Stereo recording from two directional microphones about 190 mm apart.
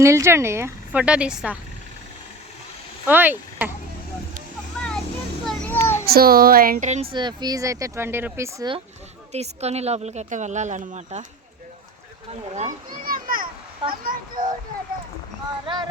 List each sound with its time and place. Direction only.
0.0 s speech: 15° right (ahead or behind)
3.1 s speech: 10° right (ahead or behind)
5.5 s children playing: 10° left (ahead or behind)
6.1 s speech: 50° right (ahead or behind)
7.1 s speech: 25° right (ahead or behind)
9.3 s speech: 35° right (ahead or behind)
12.5 s children playing: 40° right (ahead or behind)
14.0 s a sound: 45° right (ahead or behind)
15.6 s a sound: 25° right (ahead or behind)